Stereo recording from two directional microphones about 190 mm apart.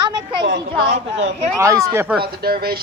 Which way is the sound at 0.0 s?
20° right (ahead or behind).